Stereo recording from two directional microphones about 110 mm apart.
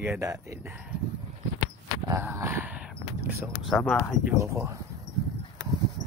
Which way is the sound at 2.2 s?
20° right (ahead or behind).